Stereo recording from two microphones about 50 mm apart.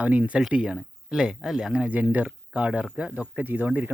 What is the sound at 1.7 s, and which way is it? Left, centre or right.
Speech, right.